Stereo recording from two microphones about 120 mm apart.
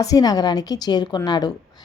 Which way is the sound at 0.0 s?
30° left (ahead or behind).